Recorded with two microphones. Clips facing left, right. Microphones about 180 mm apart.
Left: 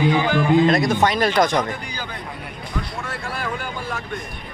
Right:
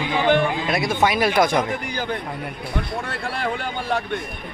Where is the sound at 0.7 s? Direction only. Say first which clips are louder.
Left 2 dB; 5° right (ahead or behind).